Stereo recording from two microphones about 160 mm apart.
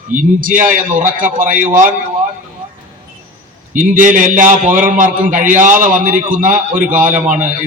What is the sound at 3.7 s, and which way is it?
A man's voice, 55° right (ahead or behind).